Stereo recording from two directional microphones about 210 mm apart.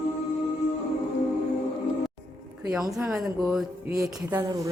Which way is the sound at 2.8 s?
15° right (ahead or behind).